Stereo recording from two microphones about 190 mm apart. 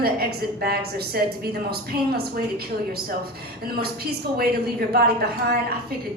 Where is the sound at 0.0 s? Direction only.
55° right (ahead or behind).